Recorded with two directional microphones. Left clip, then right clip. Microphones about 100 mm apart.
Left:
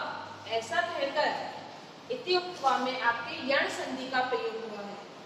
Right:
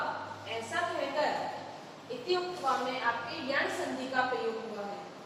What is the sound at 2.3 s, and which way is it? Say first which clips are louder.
A woman's voice: left 3 dB; 35° left (ahead or behind).